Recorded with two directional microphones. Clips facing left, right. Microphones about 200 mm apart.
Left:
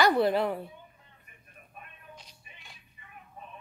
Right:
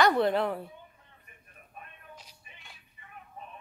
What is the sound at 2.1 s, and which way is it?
Music, 5° right (ahead or behind).